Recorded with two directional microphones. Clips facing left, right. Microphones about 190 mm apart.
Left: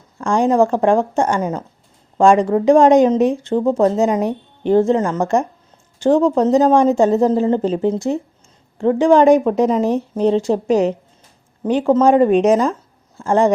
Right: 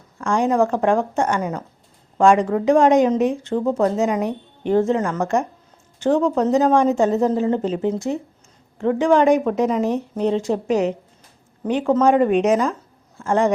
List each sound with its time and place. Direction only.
0.2 s speech: 30° left (ahead or behind)